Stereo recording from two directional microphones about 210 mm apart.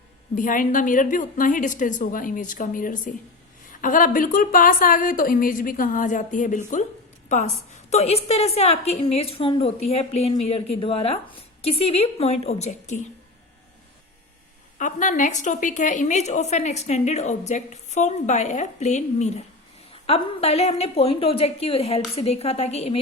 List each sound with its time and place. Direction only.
0.3 s a woman's voice: 40° left (ahead or behind)
7.9 s a woman's voice: 30° left (ahead or behind)
14.8 s a woman's voice: 35° left (ahead or behind)